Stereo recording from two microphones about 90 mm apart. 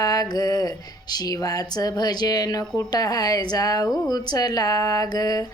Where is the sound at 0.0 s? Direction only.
45° left (ahead or behind).